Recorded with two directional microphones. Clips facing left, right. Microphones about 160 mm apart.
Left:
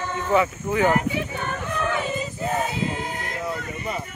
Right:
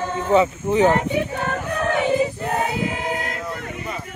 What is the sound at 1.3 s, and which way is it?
Choir, 50° right (ahead or behind).